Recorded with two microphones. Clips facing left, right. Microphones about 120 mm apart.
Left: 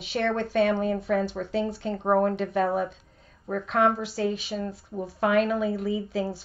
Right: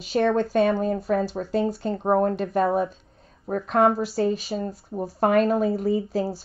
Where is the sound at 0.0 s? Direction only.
40° right (ahead or behind).